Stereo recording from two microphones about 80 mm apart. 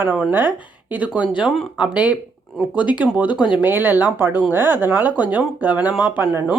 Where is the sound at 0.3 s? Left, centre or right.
Right.